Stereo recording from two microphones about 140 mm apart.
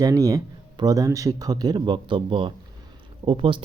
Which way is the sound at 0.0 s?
25° right (ahead or behind).